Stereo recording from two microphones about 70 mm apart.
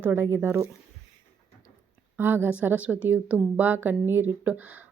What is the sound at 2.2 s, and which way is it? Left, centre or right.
Speech, right.